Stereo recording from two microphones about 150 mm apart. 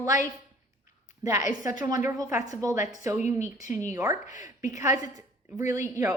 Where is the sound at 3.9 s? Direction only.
20° right (ahead or behind).